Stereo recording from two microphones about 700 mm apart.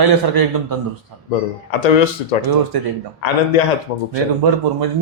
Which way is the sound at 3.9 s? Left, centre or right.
Left.